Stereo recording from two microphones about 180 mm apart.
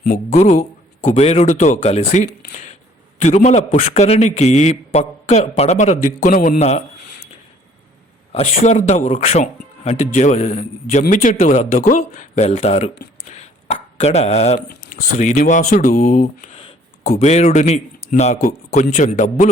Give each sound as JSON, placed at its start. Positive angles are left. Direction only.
{"t": 0.3, "sound": "a man's voice", "side_deg": 40}
{"t": 6.6, "sound": "a man's voice", "side_deg": 40}
{"t": 8.3, "sound": "a man's voice", "side_deg": 40}